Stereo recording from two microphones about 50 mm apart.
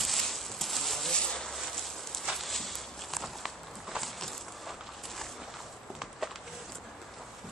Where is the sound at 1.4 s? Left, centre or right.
Centre.